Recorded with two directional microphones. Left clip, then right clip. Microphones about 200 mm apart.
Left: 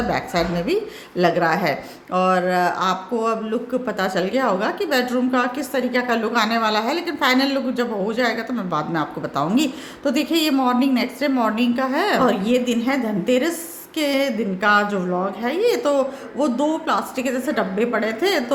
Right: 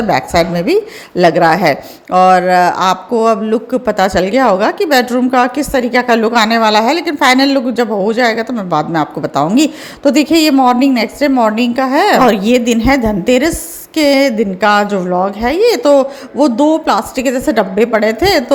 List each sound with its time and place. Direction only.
0.1 s speech: 40° right (ahead or behind)